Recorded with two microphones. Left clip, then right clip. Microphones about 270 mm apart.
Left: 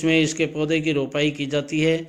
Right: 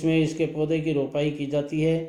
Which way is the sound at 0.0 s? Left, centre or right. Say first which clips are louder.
Left 4 dB; left.